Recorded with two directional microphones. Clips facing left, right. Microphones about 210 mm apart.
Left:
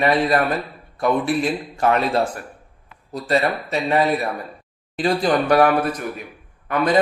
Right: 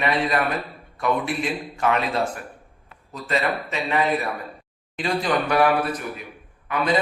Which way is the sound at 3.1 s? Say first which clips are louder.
Left 4 dB; 40° left (ahead or behind).